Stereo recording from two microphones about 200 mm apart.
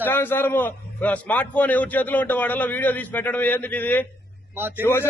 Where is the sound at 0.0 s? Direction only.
10° left (ahead or behind).